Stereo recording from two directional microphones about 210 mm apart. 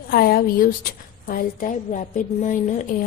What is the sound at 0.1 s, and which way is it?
A woman's voice, 45° left (ahead or behind).